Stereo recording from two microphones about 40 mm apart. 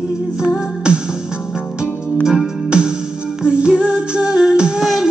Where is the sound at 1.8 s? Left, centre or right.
Centre.